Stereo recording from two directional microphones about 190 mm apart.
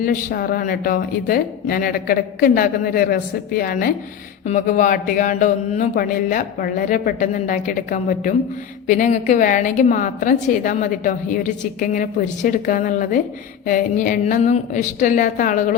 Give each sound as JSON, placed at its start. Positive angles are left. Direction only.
{"t": 0.0, "sound": "a woman's voice", "side_deg": 45}